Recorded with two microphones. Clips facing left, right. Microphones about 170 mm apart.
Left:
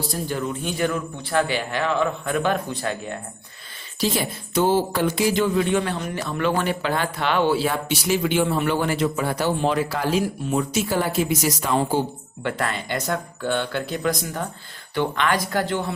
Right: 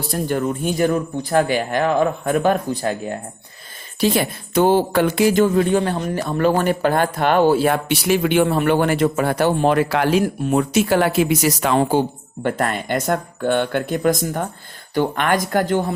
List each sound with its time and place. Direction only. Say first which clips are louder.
0.1 s speech: right 5 dB; 55° right (ahead or behind)
4.0 s speech: right 5 dB; 60° right (ahead or behind)
12.4 s speech: right 5 dB; 45° right (ahead or behind)